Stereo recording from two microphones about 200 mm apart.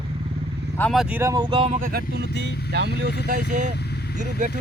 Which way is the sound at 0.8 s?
Centre (ahead or behind).